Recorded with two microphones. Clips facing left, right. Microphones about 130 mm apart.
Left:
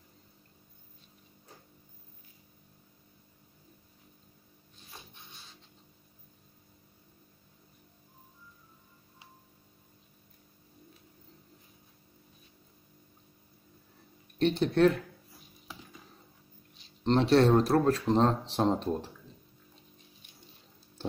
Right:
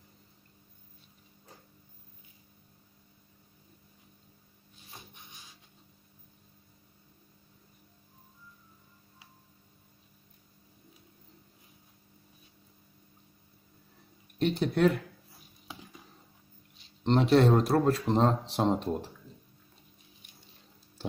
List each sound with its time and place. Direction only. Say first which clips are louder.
5.1 s music: even; 15° right (ahead or behind)
14.4 s speech: left 2 dB; 10° right (ahead or behind)
17.0 s speech: even; 15° right (ahead or behind)